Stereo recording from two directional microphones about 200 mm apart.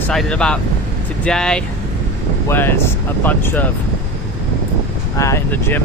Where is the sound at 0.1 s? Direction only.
5° left (ahead or behind).